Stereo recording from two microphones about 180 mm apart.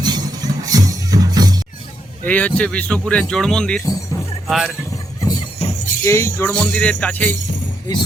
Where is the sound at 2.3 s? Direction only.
10° left (ahead or behind).